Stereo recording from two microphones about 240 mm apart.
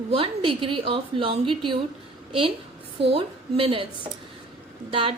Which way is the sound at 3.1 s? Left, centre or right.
Right.